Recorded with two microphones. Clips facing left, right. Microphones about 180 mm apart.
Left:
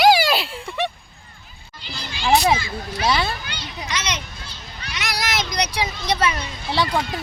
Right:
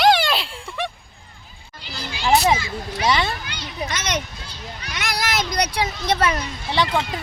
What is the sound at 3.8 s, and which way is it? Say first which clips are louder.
A child's voice: right 3 dB; 50° right (ahead or behind).